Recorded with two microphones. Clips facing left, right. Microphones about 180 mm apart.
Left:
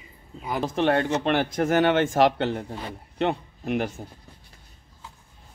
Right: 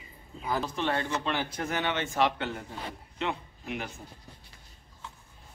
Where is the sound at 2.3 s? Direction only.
65° left (ahead or behind).